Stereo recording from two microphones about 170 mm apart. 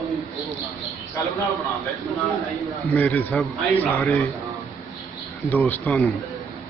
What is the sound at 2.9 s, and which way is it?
Speech, 10° left (ahead or behind).